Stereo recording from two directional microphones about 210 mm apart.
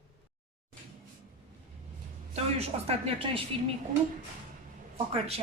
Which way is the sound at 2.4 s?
30° right (ahead or behind).